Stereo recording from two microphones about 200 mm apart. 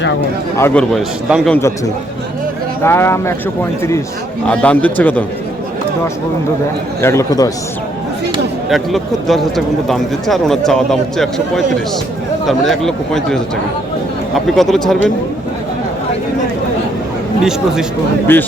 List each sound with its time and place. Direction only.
0.5 s a man's voice: 10° left (ahead or behind)
2.8 s a man's voice: 10° left (ahead or behind)
7.0 s a man's voice: 15° left (ahead or behind)
8.7 s a man's voice: centre (ahead or behind)
18.3 s a man's voice: 10° left (ahead or behind)